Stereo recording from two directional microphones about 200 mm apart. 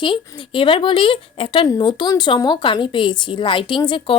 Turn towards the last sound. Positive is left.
turn(degrees=25)  # may be behind; listen again after turning